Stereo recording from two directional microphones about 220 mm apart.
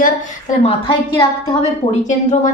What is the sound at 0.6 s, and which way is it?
A woman's voice, 25° left (ahead or behind).